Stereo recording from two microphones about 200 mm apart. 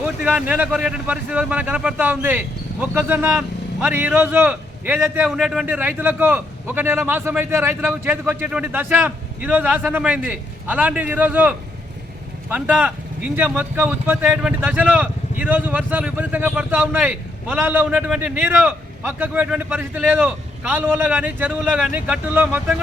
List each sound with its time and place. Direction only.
0.0 s a man's voice: 5° right (ahead or behind)